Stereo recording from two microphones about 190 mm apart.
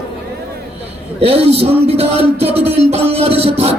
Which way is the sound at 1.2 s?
30° right (ahead or behind).